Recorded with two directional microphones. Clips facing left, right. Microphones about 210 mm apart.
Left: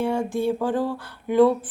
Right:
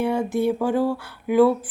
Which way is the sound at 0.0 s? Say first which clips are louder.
Right 2 dB; 10° right (ahead or behind).